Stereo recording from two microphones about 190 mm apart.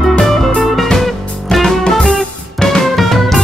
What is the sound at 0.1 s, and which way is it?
Music, 5° left (ahead or behind).